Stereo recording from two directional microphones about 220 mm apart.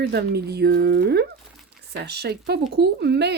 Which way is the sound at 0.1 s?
50° right (ahead or behind).